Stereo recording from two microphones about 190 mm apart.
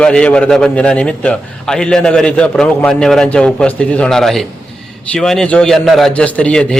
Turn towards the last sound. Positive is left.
turn(degrees=5)  # may be behind; listen again after turning